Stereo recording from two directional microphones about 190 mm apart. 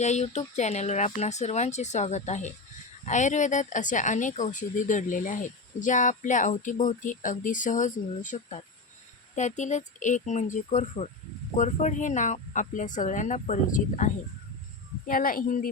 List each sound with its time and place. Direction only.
0.0 s a woman's voice: 35° left (ahead or behind)